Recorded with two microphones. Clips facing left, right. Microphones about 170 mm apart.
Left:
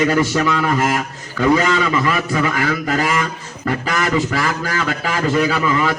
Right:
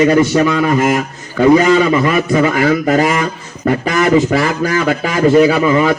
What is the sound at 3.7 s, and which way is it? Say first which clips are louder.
A man's voice: right 7 dB; 25° right (ahead or behind).